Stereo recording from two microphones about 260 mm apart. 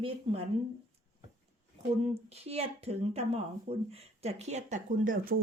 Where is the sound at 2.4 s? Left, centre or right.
Right.